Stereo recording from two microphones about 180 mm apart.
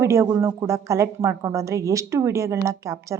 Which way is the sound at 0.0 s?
15° right (ahead or behind).